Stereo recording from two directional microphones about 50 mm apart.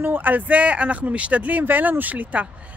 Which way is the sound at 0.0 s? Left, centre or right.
Right.